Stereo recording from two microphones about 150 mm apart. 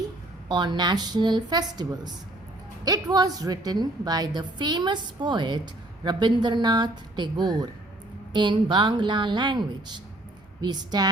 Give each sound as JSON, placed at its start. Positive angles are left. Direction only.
{"t": 0.4, "sound": "a woman's voice", "side_deg": -30}